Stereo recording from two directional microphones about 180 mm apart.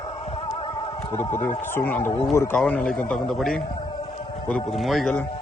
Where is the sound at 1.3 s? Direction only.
10° left (ahead or behind).